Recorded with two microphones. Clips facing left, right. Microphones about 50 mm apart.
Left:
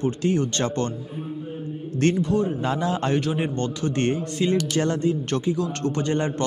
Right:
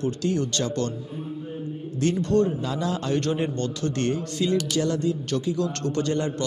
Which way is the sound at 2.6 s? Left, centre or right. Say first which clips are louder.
Left 3 dB; left.